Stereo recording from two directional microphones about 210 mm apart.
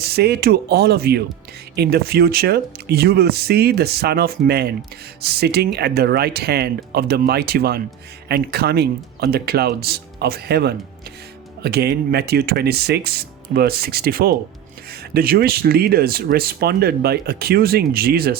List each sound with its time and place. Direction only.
0.0 s speech: 50° right (ahead or behind)